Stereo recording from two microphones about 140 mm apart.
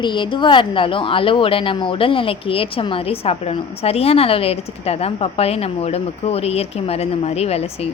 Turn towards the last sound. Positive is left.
turn(degrees=45)  # may be behind; listen again after turning